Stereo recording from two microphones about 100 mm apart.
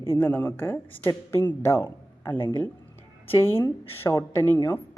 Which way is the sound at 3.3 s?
25° left (ahead or behind).